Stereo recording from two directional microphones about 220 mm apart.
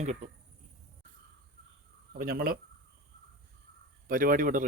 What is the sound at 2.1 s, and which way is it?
Speech, 45° right (ahead or behind).